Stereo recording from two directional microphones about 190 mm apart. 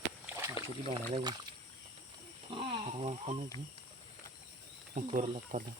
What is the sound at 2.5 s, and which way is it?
Snoring, 30° right (ahead or behind).